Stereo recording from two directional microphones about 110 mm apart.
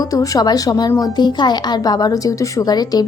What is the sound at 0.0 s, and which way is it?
A woman's voice, 35° left (ahead or behind).